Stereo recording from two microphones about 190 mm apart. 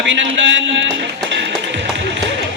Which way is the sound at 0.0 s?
75° right (ahead or behind).